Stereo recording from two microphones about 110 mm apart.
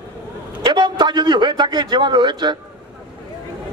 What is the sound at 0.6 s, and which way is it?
A man's voice, 45° right (ahead or behind).